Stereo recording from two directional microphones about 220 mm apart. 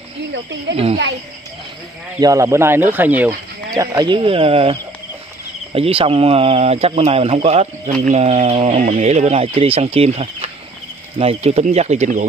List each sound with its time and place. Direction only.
0.3 s speech: 55° right (ahead or behind)
2.1 s speech: 15° right (ahead or behind); by 12.3 s 35° right (ahead or behind)